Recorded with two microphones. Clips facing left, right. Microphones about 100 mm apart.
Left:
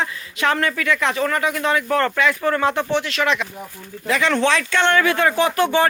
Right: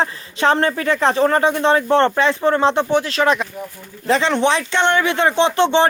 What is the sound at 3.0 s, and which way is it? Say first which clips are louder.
Speech: right 4 dB; 40° right (ahead or behind).